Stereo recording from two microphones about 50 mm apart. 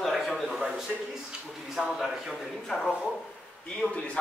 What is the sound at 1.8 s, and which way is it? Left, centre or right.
Speech, centre.